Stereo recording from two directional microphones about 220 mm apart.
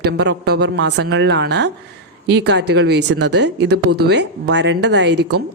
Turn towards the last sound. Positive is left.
turn(degrees=-50)  # may be behind; listen again after turning